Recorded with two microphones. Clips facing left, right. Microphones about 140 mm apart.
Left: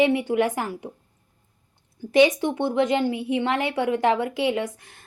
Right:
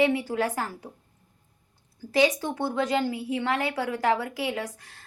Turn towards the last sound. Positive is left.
turn(degrees=20)  # may be behind; listen again after turning